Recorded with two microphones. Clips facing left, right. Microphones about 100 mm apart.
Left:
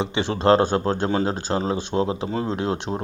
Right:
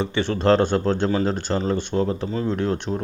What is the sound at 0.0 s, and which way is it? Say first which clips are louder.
Speech: right 1 dB; 25° left (ahead or behind).